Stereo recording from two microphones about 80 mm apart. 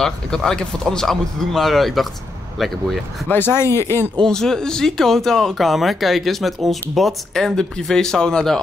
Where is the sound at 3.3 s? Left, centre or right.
Left.